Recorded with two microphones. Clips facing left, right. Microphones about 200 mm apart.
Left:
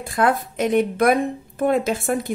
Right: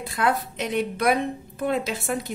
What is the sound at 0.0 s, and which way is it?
A woman's voice, 50° left (ahead or behind).